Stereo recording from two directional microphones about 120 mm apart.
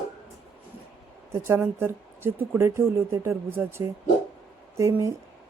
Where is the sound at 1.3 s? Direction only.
20° right (ahead or behind).